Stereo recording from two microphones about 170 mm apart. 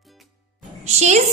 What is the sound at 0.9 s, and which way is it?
Speech, 40° right (ahead or behind).